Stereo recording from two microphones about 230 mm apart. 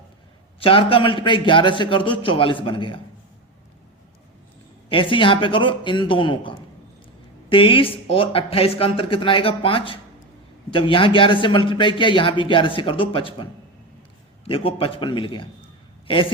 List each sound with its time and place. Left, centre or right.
0.6 s a man's voice: left
4.9 s a man's voice: left
7.5 s a man's voice: left